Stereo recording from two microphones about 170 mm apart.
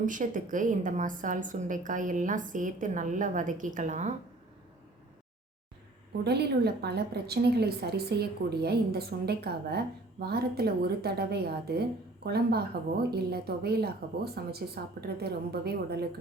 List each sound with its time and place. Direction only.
0.0 s a woman's voice: 50° right (ahead or behind)
6.2 s a woman's voice: 75° right (ahead or behind)